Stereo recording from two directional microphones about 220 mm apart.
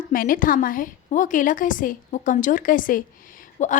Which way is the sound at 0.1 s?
40° left (ahead or behind).